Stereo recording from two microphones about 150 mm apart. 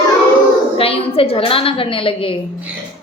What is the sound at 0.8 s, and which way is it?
A woman's voice, 40° left (ahead or behind).